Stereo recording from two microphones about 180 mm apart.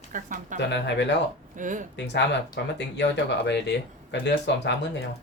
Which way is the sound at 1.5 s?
45° right (ahead or behind).